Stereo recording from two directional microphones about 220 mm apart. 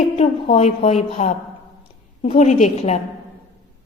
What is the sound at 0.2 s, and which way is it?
A woman's voice, 30° left (ahead or behind).